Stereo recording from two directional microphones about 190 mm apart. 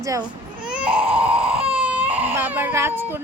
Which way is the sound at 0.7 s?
5° right (ahead or behind).